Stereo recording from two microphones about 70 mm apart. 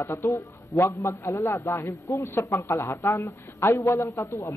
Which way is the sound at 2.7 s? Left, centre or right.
Left.